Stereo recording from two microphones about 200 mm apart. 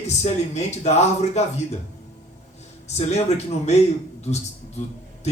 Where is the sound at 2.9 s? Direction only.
35° left (ahead or behind).